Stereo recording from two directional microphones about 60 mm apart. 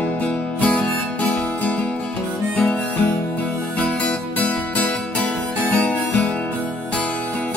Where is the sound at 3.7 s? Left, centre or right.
Left.